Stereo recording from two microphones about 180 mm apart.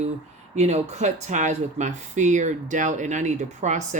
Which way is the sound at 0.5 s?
40° right (ahead or behind).